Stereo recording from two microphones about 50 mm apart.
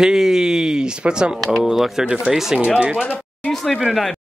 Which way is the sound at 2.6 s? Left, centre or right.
Right.